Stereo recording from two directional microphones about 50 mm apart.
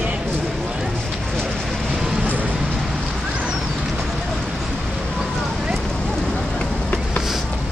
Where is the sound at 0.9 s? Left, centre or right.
Centre.